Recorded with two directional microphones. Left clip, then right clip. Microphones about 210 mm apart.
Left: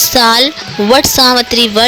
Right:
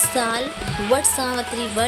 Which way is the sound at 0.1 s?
40° left (ahead or behind).